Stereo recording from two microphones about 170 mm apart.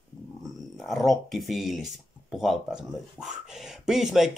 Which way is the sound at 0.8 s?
Centre (ahead or behind).